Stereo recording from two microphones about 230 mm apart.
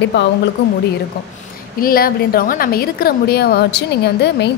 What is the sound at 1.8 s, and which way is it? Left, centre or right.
A woman's voice, left.